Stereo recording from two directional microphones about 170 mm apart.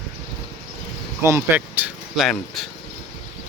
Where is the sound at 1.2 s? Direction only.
15° right (ahead or behind).